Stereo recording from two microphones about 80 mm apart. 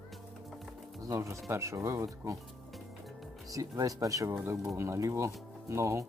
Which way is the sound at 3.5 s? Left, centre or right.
Right.